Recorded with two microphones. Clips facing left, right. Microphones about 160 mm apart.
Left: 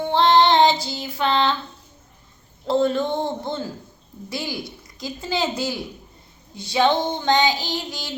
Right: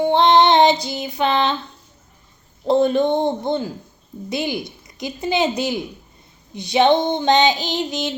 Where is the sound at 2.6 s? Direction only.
20° right (ahead or behind).